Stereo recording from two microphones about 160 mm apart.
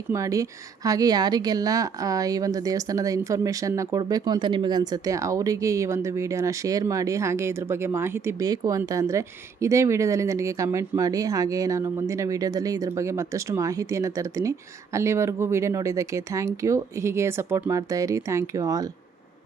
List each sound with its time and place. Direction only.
0.1 s speech: 20° right (ahead or behind)